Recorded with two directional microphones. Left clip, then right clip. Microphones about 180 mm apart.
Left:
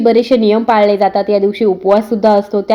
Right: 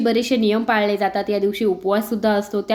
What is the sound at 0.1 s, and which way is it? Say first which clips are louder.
A woman's voice: left 10 dB; 5° left (ahead or behind).